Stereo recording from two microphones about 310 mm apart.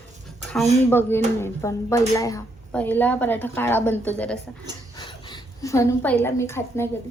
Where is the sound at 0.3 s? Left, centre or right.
Centre.